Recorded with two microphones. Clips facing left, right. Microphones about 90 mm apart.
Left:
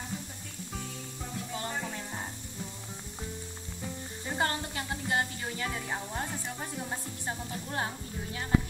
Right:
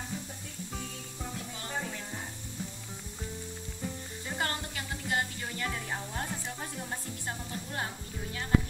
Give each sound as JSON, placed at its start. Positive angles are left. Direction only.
{"t": 4.3, "sound": "a sound", "side_deg": 25}
{"t": 5.7, "sound": "music", "side_deg": 5}
{"t": 7.7, "sound": "speech", "side_deg": 20}